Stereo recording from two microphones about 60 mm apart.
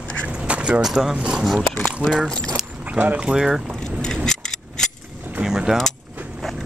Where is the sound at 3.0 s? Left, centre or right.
Right.